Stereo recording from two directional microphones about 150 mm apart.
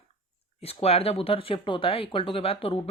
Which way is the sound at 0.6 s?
40° left (ahead or behind).